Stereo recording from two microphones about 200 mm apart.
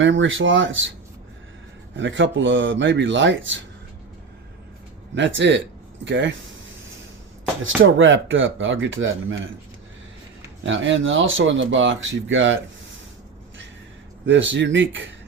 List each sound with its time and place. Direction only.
0.0 s speech: 70° right (ahead or behind)
2.0 s speech: 70° right (ahead or behind)
5.1 s speech: 65° right (ahead or behind)
7.8 s speech: 75° right (ahead or behind)
10.7 s speech: 70° right (ahead or behind)
14.3 s speech: 65° right (ahead or behind)